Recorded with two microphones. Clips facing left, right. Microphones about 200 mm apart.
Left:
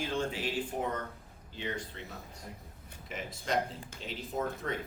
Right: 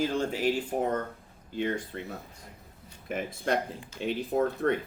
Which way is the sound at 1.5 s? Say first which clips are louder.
Right 8 dB; 50° right (ahead or behind).